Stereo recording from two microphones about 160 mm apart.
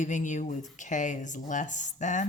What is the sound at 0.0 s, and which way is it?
Speech, 50° left (ahead or behind).